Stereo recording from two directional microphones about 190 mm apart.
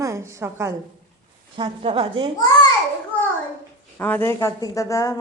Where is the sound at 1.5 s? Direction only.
25° right (ahead or behind).